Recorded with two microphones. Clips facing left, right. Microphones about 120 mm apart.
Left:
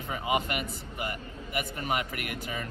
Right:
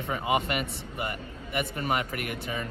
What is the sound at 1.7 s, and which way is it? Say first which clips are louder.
Speech: right 2 dB; 40° right (ahead or behind).